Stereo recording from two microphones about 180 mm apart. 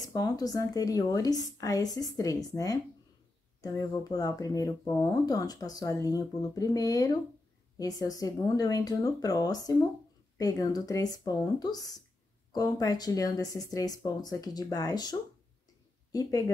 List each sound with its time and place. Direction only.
0.0 s speech: 20° left (ahead or behind)